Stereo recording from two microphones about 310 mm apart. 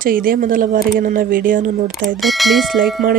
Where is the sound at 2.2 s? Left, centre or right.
Centre.